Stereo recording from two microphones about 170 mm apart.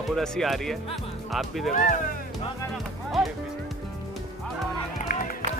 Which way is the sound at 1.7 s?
50° left (ahead or behind).